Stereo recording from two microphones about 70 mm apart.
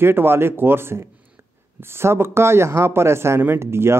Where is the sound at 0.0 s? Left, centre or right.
Right.